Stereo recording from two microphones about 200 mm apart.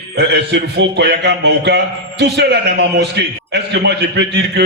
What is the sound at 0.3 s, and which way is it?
Speech, 60° right (ahead or behind).